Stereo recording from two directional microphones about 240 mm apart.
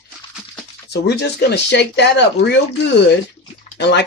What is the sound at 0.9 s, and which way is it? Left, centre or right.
Speech, left.